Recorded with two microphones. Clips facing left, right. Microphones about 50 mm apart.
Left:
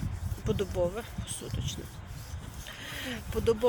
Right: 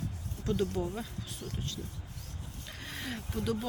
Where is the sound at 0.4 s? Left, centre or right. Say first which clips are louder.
Left 2 dB; left.